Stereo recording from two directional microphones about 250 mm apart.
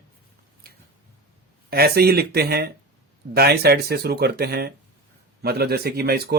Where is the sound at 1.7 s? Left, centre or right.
Right.